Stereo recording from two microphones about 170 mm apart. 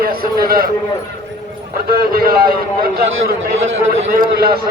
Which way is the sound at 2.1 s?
60° right (ahead or behind).